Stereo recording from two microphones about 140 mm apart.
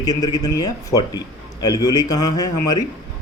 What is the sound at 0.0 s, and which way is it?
Speech, 25° left (ahead or behind).